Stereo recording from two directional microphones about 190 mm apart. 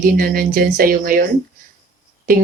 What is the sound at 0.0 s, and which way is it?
Speech, 50° right (ahead or behind).